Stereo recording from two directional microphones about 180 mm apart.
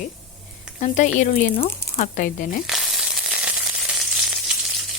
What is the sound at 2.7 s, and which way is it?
Sizzle, centre (ahead or behind).